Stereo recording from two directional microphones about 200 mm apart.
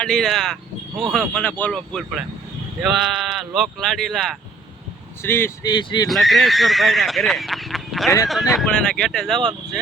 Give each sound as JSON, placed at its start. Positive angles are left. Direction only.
{"t": 0.0, "sound": "speech", "side_deg": 5}
{"t": 5.2, "sound": "speech", "side_deg": 10}
{"t": 6.1, "sound": "speech", "side_deg": 0}